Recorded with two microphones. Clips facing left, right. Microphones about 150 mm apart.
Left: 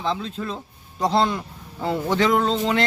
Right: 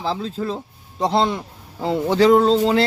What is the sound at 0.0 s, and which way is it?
Speech, 35° right (ahead or behind).